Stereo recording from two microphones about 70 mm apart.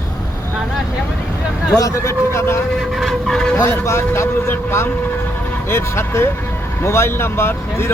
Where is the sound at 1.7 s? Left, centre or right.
Left.